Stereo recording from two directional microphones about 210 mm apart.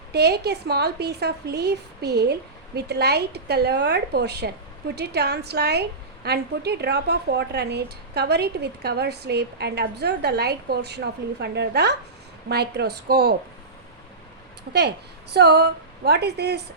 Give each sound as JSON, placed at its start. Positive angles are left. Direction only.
{"t": 0.1, "sound": "speech", "side_deg": -50}
{"t": 14.7, "sound": "speech", "side_deg": -50}